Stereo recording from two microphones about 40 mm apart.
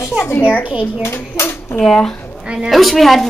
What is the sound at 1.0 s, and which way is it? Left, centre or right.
Speech, left.